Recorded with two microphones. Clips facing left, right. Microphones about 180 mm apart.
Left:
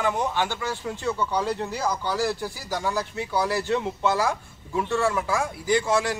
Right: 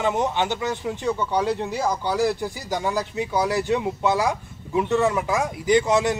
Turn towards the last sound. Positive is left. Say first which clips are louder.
# right 4 dB
turn(degrees=-20)  # may be behind; listen again after turning